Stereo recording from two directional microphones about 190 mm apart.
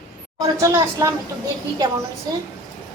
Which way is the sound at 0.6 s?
15° right (ahead or behind).